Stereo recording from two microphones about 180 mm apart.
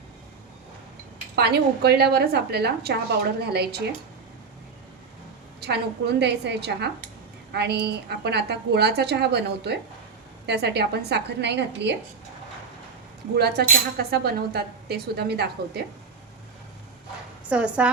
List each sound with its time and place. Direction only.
1.4 s a woman's voice: 65° right (ahead or behind)
5.5 s a woman's voice: 65° right (ahead or behind)
13.3 s a woman's voice: 65° right (ahead or behind)
17.5 s a woman's voice: 5° right (ahead or behind)